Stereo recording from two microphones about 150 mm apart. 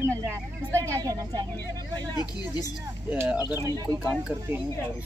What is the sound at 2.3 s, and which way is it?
Speech, 25° left (ahead or behind).